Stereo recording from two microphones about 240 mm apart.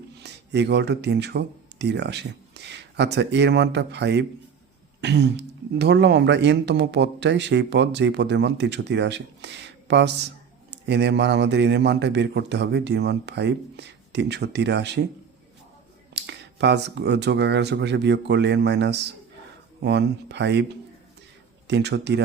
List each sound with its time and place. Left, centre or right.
0.2 s speech: right
16.1 s speech: right
21.7 s speech: right